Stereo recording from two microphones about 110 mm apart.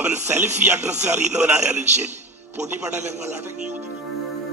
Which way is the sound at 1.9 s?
90° right.